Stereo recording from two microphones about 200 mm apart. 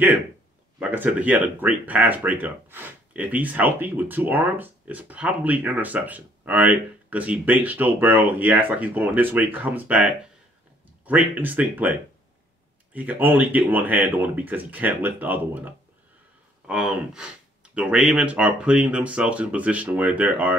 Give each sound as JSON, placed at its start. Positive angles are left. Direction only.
{"t": 0.7, "sound": "speech", "side_deg": -10}